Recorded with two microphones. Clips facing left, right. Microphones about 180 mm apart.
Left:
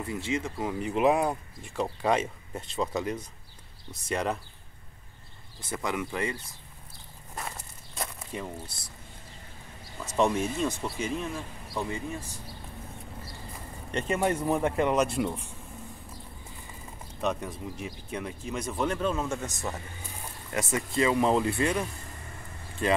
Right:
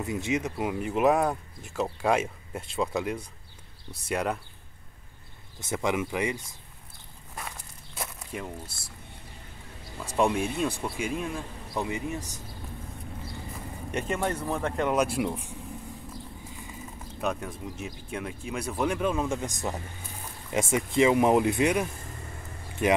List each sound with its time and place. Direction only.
0.0 s speech: 20° right (ahead or behind)
0.8 s speech: centre (ahead or behind)
5.6 s speech: 20° right (ahead or behind)
7.9 s walk: 5° right (ahead or behind)
10.1 s speech: 10° right (ahead or behind)
13.9 s speech: centre (ahead or behind)
14.2 s speech: 15° left (ahead or behind)
14.8 s speech: centre (ahead or behind)
17.2 s speech: 5° right (ahead or behind)